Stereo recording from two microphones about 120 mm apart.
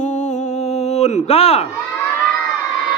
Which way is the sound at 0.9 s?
60° left (ahead or behind).